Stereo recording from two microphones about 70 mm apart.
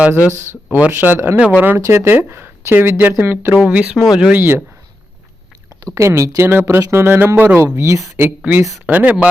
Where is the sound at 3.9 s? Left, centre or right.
Centre.